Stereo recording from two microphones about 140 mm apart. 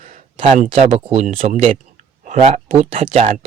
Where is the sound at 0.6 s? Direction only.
40° right (ahead or behind).